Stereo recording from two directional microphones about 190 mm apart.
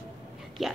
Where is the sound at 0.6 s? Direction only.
Centre (ahead or behind).